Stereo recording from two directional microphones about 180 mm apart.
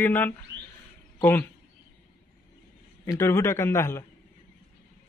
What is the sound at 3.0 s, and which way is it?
A man's voice, 15° left (ahead or behind).